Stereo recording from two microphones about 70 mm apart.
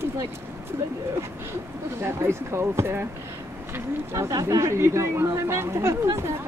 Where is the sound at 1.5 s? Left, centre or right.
Right.